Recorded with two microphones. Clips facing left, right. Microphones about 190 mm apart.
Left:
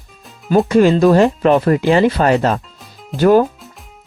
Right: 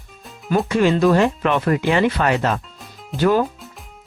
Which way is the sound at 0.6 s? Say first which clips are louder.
Left 4 dB; 40° left (ahead or behind).